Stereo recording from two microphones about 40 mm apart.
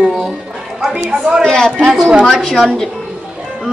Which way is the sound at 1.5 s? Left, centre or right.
Centre.